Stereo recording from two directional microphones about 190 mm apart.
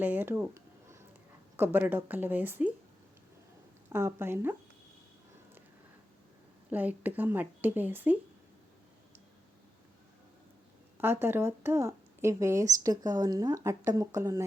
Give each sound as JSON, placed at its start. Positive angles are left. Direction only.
{"t": 0.0, "sound": "a sound", "side_deg": -10}
{"t": 1.5, "sound": "a woman's voice", "side_deg": -10}
{"t": 3.8, "sound": "a woman's voice", "side_deg": -15}
{"t": 6.7, "sound": "a woman's voice", "side_deg": -10}
{"t": 11.0, "sound": "a woman's voice", "side_deg": -10}